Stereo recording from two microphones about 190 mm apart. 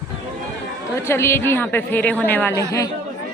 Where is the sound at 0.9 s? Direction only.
15° left (ahead or behind).